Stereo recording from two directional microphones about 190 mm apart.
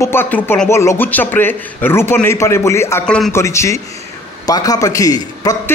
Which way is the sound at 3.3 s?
15° left (ahead or behind).